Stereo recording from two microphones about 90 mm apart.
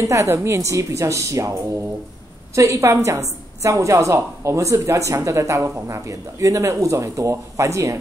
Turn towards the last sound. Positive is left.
turn(degrees=-35)  # may be behind; listen again after turning